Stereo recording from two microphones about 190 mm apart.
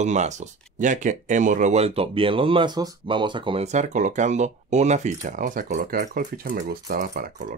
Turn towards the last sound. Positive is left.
turn(degrees=-45)  # may be behind; listen again after turning